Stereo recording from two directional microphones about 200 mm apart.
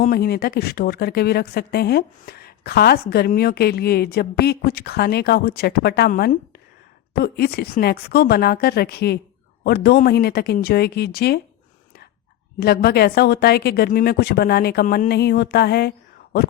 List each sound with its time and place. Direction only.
0.0 s speech: 50° left (ahead or behind)
12.5 s speech: 50° left (ahead or behind)